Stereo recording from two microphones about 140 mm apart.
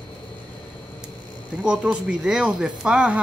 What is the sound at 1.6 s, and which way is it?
Speech, 5° right (ahead or behind).